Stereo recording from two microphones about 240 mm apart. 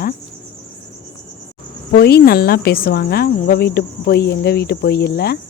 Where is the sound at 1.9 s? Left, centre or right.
Left.